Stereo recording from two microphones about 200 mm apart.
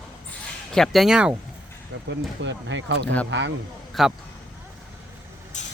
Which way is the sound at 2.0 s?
65° right (ahead or behind).